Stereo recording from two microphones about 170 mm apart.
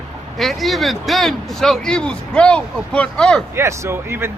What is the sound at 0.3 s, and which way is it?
Speech, centre (ahead or behind).